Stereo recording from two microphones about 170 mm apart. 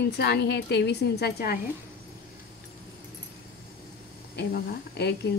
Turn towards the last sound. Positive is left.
turn(degrees=80)